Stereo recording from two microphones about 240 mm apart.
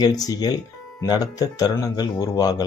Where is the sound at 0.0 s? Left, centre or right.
Centre.